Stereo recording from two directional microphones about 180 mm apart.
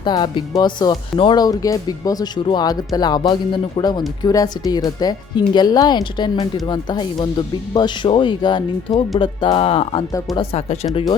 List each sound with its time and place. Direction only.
0.0 s speech: 25° left (ahead or behind)